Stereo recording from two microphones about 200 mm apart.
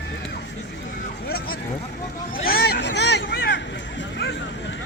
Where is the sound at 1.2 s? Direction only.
50° left (ahead or behind).